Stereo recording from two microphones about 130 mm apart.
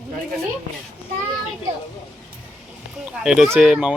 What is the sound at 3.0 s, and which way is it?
Speech, 5° right (ahead or behind).